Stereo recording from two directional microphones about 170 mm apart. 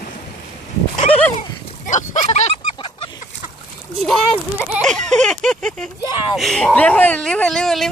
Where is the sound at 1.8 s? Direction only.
45° left (ahead or behind).